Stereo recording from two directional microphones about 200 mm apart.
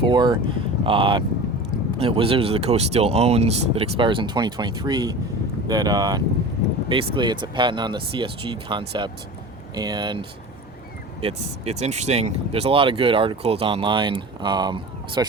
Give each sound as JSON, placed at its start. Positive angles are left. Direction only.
{"t": 0.0, "sound": "speech", "side_deg": -20}